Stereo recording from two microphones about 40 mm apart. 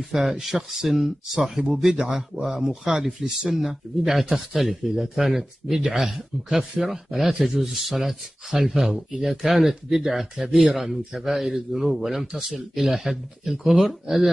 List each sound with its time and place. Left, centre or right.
0.1 s speech: centre
2.0 s speech: right